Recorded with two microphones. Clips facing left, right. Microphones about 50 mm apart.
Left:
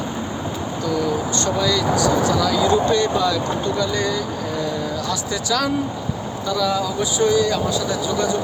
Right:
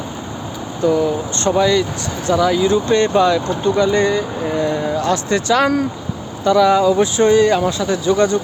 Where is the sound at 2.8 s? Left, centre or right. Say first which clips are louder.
Right 4 dB; right.